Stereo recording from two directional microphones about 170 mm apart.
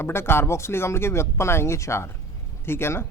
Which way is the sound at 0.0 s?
15° left (ahead or behind).